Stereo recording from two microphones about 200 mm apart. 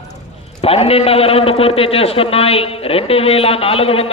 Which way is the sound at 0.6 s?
30° left (ahead or behind).